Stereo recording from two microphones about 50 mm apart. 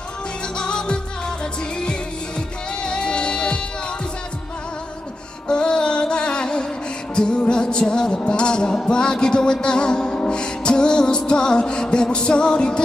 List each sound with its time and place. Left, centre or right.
0.6 s music: centre
5.5 s music: centre